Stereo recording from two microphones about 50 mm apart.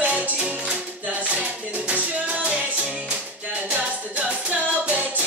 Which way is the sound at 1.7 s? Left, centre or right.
Right.